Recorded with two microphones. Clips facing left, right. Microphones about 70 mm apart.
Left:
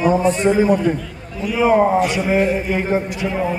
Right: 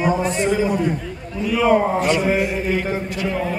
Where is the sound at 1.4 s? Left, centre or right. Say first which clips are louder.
Left 2 dB; centre.